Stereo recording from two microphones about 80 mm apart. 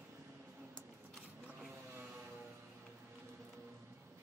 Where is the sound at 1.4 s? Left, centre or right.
Centre.